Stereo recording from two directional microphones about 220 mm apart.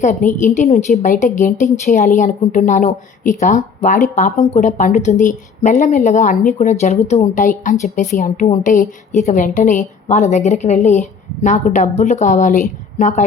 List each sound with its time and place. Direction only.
0.0 s a woman's voice: 35° left (ahead or behind)